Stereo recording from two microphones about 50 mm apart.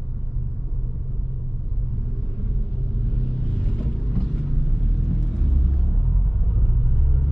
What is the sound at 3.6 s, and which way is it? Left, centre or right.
Vehicle, centre.